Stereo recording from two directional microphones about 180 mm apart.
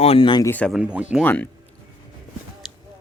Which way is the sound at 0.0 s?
30° left (ahead or behind).